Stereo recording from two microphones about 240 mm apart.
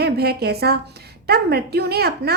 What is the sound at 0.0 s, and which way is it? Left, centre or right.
A woman's voice, right.